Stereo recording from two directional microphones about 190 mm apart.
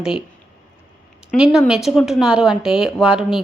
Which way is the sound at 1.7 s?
Centre (ahead or behind).